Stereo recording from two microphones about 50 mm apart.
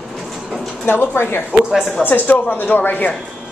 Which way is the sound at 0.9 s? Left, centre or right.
Left.